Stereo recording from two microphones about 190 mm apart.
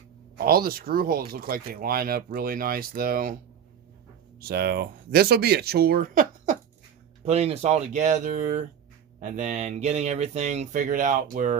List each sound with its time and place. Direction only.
0.3 s speech: 50° right (ahead or behind)
4.4 s speech: 55° right (ahead or behind)
7.3 s speech: 35° right (ahead or behind)